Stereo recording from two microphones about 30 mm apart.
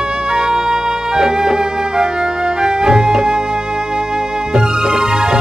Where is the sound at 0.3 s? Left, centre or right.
Right.